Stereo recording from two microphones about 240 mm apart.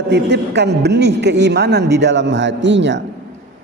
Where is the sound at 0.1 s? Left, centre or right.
Right.